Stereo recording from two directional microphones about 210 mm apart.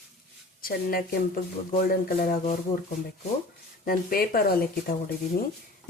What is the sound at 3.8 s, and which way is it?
Speech, 45° left (ahead or behind).